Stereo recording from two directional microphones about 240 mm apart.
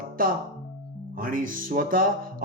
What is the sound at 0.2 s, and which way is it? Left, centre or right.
Music, right.